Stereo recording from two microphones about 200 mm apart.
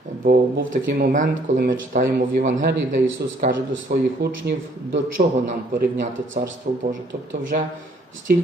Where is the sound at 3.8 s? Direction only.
50° right (ahead or behind).